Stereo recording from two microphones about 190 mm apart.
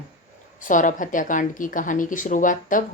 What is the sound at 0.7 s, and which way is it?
A woman's voice, 45° left (ahead or behind).